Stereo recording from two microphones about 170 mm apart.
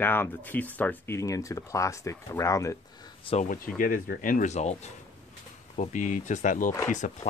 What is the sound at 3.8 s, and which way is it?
Speech, 55° left (ahead or behind).